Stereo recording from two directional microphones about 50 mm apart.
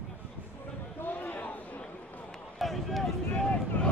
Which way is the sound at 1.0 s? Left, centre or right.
Left.